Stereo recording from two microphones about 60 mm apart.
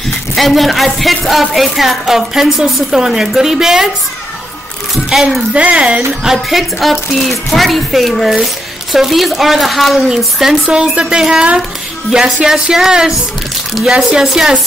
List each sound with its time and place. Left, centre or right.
0.4 s a woman's voice: centre
5.5 s speech: centre
6.2 s a woman's voice: centre
10.7 s a woman's voice: centre